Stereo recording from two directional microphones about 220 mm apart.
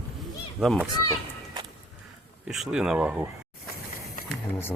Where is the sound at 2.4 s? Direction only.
5° right (ahead or behind).